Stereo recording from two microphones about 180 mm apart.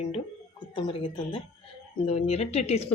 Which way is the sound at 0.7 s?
30° left (ahead or behind).